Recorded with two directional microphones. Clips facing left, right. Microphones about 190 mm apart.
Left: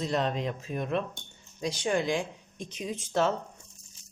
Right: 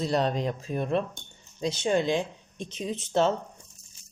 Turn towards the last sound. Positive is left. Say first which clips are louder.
# right 3 dB
turn(degrees=-25)  # may be behind; listen again after turning